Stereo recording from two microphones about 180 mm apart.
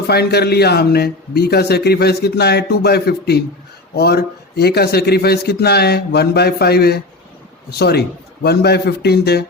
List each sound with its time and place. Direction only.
0.1 s a man's voice: 65° left (ahead or behind)